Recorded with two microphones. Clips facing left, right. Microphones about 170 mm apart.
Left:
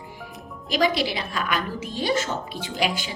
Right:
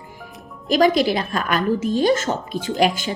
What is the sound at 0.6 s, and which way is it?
A woman's voice, 45° right (ahead or behind).